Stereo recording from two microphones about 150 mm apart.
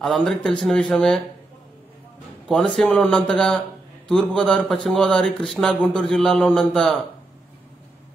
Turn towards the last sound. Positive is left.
turn(degrees=5)  # may be behind; listen again after turning